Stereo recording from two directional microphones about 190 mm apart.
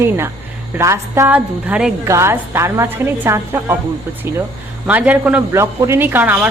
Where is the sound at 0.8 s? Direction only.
15° right (ahead or behind).